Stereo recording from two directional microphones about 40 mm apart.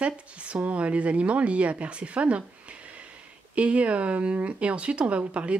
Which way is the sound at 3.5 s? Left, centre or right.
Right.